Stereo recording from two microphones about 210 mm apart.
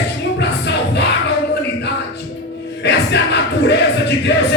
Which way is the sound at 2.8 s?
55° left (ahead or behind).